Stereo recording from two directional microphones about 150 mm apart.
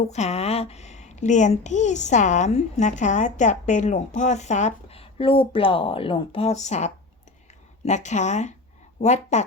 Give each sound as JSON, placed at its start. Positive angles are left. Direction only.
{"t": 0.0, "sound": "a woman's voice", "side_deg": 50}